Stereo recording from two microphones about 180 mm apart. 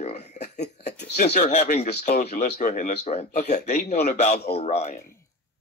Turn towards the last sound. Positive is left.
turn(degrees=35)  # may be behind; listen again after turning